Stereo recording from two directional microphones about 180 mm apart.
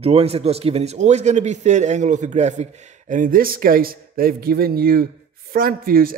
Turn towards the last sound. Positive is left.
turn(degrees=-55)  # may be behind; listen again after turning